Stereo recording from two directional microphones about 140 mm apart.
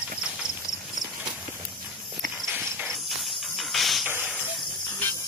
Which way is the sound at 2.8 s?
Centre (ahead or behind).